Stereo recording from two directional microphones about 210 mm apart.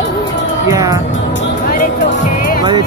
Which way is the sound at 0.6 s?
15° right (ahead or behind).